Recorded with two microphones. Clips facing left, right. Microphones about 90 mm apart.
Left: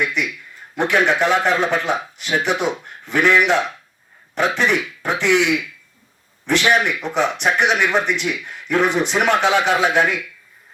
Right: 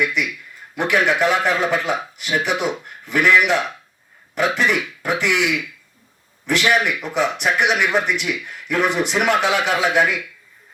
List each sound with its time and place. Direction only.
0.8 s speech: 25° left (ahead or behind)